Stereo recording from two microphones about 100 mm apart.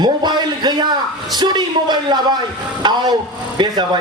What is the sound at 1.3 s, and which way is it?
A man's voice, 45° right (ahead or behind).